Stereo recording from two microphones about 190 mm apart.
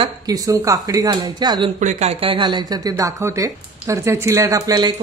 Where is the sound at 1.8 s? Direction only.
35° right (ahead or behind); by 4.9 s 20° right (ahead or behind).